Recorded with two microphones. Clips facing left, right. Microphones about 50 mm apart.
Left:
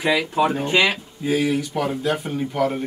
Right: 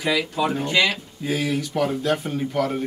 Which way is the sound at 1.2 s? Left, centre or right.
Centre.